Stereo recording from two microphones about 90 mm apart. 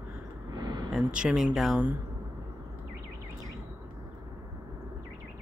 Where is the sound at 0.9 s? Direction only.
10° right (ahead or behind).